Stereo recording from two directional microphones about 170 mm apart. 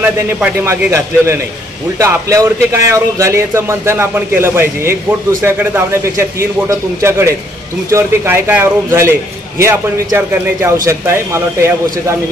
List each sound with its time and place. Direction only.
0.0 s speech: 10° right (ahead or behind)